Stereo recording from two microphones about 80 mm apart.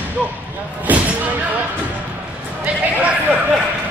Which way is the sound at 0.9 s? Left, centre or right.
Right.